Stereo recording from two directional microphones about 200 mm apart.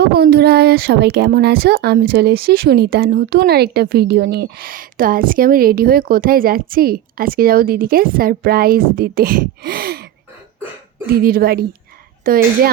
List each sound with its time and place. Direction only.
0.0 s speech: 50° right (ahead or behind)